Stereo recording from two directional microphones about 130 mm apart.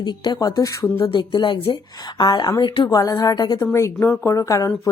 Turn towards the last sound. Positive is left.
turn(degrees=25)  # may be behind; listen again after turning